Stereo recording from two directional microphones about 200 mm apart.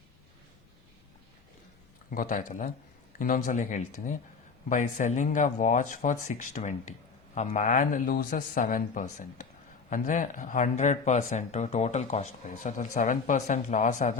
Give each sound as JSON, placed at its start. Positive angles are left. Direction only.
{"t": 2.0, "sound": "speech", "side_deg": 40}